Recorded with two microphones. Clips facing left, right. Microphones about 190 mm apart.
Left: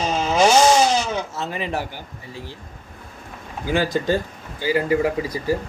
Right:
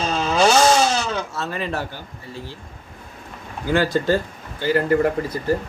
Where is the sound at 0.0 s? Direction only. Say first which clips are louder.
Even; 15° left (ahead or behind).